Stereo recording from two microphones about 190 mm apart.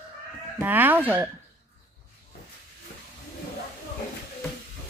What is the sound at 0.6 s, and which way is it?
Speech, 10° right (ahead or behind).